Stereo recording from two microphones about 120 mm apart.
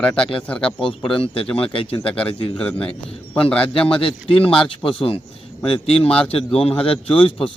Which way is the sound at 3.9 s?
50° left (ahead or behind).